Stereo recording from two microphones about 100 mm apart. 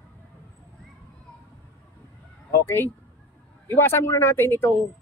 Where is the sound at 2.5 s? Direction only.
20° left (ahead or behind).